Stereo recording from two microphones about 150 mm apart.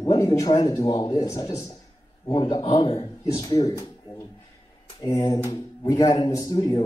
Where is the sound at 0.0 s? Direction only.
30° left (ahead or behind).